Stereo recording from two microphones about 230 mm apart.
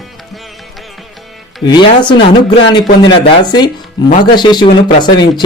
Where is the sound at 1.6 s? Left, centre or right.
Centre.